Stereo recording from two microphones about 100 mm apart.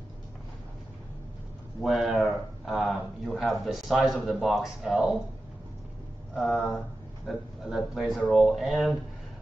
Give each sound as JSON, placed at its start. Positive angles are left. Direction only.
{"t": 1.8, "sound": "speech", "side_deg": 0}
{"t": 6.3, "sound": "speech", "side_deg": 0}